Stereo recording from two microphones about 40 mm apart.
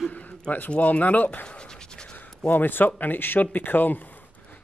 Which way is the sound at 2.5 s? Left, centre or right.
Left.